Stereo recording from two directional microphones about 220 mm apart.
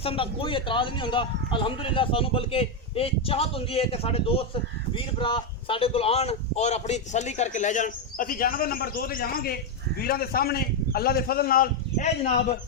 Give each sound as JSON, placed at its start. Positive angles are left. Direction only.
{"t": 0.0, "sound": "a man's voice", "side_deg": 25}